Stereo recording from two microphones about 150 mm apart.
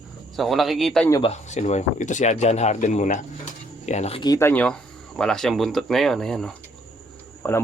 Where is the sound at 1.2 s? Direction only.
50° left (ahead or behind).